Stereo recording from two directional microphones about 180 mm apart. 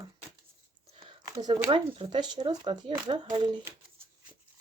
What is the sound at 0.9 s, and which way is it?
Speech, 25° right (ahead or behind).